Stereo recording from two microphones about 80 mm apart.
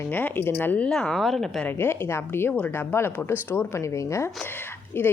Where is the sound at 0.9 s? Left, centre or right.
Centre.